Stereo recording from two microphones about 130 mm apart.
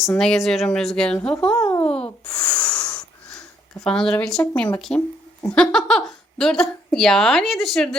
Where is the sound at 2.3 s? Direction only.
30° left (ahead or behind).